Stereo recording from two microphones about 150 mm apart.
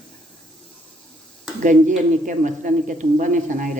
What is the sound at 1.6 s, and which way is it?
Speech, 60° right (ahead or behind).